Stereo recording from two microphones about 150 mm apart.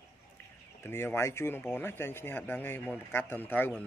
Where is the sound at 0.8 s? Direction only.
15° left (ahead or behind).